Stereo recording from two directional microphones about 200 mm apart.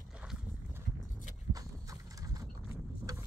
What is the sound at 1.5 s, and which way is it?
Horse, 15° right (ahead or behind).